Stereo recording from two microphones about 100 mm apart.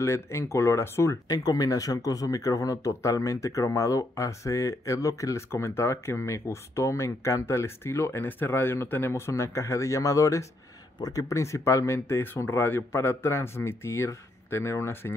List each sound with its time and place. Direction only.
0.0 s speech: 30° left (ahead or behind)
1.4 s speech: 40° left (ahead or behind); by 15.1 s 25° left (ahead or behind)